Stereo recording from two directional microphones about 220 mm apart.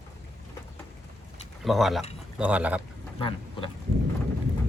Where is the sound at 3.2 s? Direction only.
25° left (ahead or behind).